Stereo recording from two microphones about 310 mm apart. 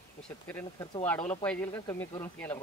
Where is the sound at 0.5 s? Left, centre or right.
Centre.